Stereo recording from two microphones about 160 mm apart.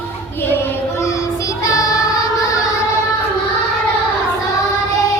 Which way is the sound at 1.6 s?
20° left (ahead or behind).